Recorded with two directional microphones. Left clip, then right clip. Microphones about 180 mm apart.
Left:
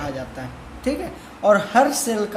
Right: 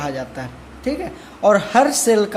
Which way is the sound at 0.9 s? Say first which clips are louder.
Right 1 dB; 15° right (ahead or behind).